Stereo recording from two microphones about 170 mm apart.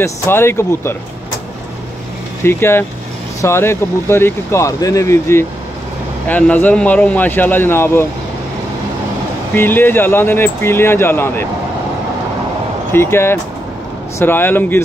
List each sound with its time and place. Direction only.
0.0 s speech: 15° left (ahead or behind)
2.4 s speech: 15° left (ahead or behind)
9.6 s speech: 10° left (ahead or behind)
12.9 s speech: 15° left (ahead or behind)